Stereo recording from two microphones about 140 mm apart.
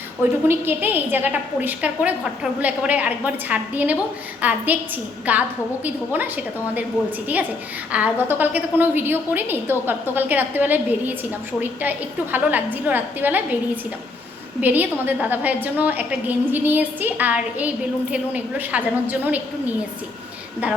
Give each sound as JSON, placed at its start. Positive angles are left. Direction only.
{"t": 0.4, "sound": "a woman's voice", "side_deg": -15}
{"t": 7.9, "sound": "a woman's voice", "side_deg": -10}
{"t": 14.6, "sound": "a woman's voice", "side_deg": -10}